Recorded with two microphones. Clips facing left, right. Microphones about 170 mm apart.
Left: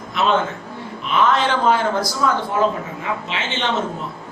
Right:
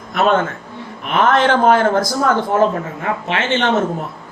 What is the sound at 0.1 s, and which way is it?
A man's voice, 50° right (ahead or behind).